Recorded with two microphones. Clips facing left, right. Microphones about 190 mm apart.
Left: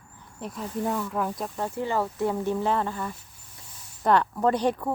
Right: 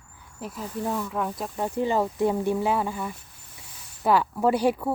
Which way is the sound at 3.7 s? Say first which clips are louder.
Right 1 dB; 70° right (ahead or behind).